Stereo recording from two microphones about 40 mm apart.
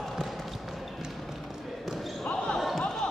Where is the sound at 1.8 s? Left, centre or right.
Centre.